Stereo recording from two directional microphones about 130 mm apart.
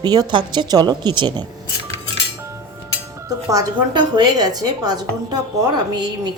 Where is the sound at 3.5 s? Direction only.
30° right (ahead or behind).